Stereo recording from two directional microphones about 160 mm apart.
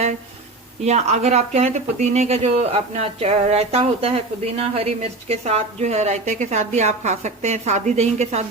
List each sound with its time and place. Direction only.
0.9 s speech: 45° right (ahead or behind)